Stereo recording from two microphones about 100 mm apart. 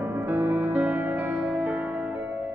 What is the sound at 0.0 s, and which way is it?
Music, 20° right (ahead or behind).